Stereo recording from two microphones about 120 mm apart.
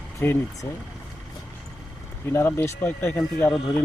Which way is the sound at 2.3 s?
20° left (ahead or behind).